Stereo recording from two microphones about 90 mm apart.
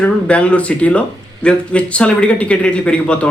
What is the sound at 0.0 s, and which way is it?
Speech, 15° left (ahead or behind).